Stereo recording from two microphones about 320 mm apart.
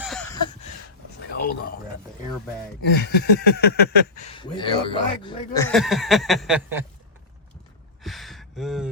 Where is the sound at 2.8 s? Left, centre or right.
Left.